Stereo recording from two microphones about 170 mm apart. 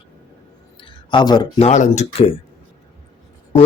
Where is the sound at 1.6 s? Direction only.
45° left (ahead or behind).